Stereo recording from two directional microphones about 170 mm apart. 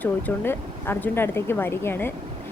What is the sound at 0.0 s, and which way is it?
Speech, 10° left (ahead or behind).